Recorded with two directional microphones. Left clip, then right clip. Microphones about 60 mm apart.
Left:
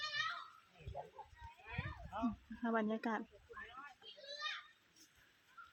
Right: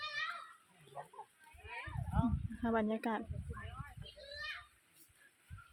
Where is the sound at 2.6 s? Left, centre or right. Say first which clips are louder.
Right 3 dB; right.